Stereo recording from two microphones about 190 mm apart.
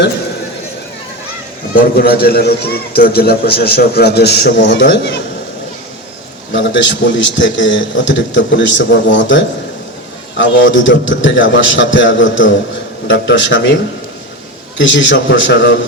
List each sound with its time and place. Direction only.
1.7 s a man's voice: 50° left (ahead or behind)
6.5 s a man's voice: 75° left (ahead or behind)
13.1 s a man's voice: 70° left (ahead or behind)
14.8 s a man's voice: 75° left (ahead or behind)